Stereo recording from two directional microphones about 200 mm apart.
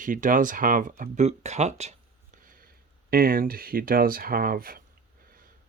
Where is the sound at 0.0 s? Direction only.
40° right (ahead or behind).